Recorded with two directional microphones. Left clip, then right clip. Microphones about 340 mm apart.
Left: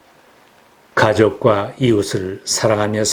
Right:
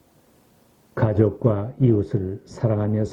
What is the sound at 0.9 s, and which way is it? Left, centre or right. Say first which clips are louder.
Speech: left 9 dB; centre.